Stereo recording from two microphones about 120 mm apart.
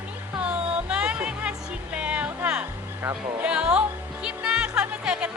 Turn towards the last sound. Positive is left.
turn(degrees=-10)  # may be behind; listen again after turning